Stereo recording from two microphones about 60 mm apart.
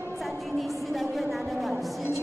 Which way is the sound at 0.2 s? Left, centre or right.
Centre.